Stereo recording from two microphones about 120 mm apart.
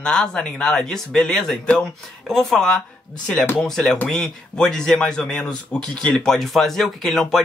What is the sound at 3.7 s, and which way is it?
Speech, 5° left (ahead or behind).